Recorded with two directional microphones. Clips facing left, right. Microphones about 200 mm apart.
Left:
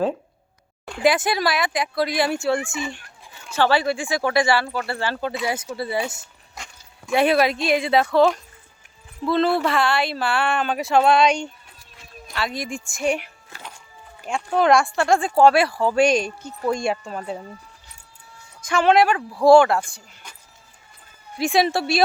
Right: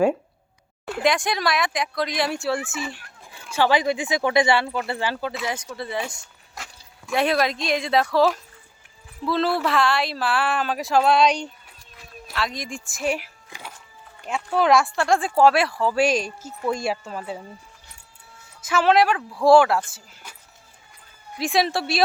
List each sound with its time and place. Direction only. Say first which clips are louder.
0.9 s speech: left 2 dB; centre (ahead or behind)
3.5 s speech: even; 15° right (ahead or behind)
5.1 s speech: left 3 dB; centre (ahead or behind)
13.5 s music: right 1 dB; 10° right (ahead or behind)
14.3 s speech: left 2 dB; centre (ahead or behind)
18.6 s speech: left 1 dB; 5° right (ahead or behind)
21.3 s speech: left 3 dB; centre (ahead or behind)